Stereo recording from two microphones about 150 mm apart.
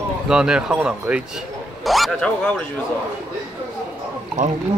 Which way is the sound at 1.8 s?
Centre (ahead or behind).